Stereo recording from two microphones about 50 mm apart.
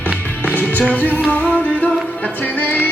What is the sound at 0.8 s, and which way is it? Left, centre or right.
Music, left.